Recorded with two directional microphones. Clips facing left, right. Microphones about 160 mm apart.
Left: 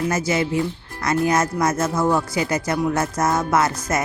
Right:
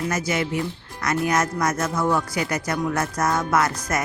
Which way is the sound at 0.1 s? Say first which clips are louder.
Left 3 dB; 25° left (ahead or behind).